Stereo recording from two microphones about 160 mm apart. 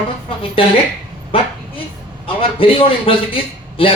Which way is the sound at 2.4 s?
35° left (ahead or behind).